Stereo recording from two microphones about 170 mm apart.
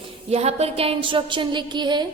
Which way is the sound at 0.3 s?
40° right (ahead or behind).